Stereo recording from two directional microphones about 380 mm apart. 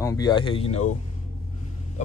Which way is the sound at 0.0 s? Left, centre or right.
Centre.